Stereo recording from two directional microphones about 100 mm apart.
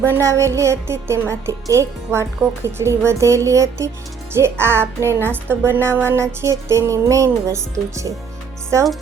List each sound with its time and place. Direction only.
0.0 s a woman's voice: 30° right (ahead or behind)